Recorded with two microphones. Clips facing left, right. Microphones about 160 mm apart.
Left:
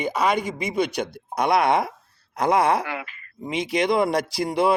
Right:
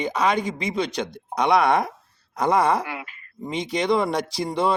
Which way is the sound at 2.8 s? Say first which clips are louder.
Left 1 dB; 90° left.